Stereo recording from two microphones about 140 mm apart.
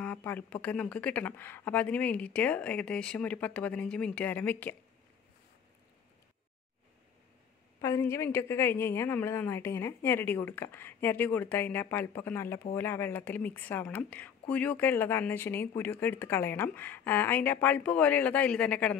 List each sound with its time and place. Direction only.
0.0 s a woman's voice: 10° left (ahead or behind)
7.8 s a woman's voice: 20° left (ahead or behind)